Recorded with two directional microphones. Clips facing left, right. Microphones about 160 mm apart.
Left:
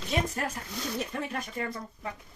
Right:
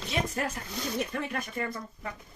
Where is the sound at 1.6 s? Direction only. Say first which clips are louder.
Even; 35° left (ahead or behind).